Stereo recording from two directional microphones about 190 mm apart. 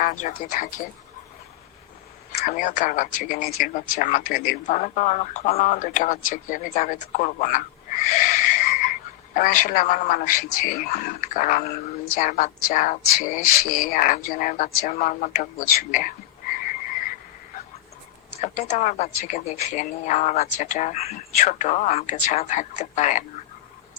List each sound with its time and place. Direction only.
0.0 s speech: 40° left (ahead or behind)
2.4 s speech: 40° left (ahead or behind)
18.3 s speech: 35° left (ahead or behind)